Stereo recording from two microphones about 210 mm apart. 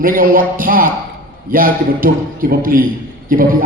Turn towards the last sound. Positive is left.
turn(degrees=-40)  # may be behind; listen again after turning